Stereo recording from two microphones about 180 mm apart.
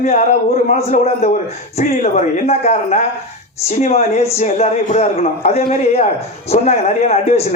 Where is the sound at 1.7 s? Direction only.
40° left (ahead or behind).